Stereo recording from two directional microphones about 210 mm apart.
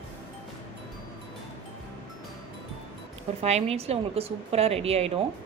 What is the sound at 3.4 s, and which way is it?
Speech, 30° right (ahead or behind).